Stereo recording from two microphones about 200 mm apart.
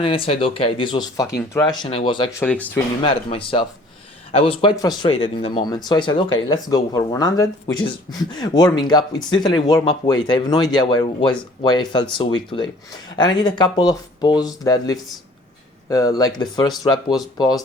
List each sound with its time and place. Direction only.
0.0 s speech: 25° left (ahead or behind)
2.4 s speech: 10° left (ahead or behind)
3.0 s speech: 25° left (ahead or behind)